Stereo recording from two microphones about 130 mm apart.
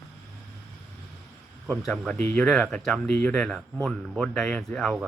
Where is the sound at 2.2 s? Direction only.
15° left (ahead or behind).